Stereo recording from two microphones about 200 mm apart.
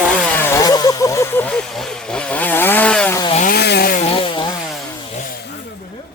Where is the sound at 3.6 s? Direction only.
55° left (ahead or behind).